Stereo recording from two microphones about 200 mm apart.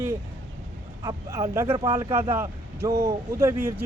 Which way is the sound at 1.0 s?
15° right (ahead or behind).